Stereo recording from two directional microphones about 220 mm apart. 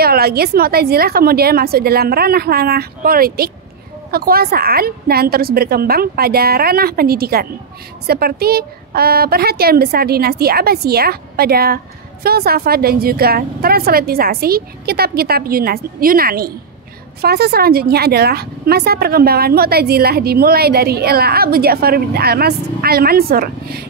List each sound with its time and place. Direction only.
0.0 s speech: 45° right (ahead or behind)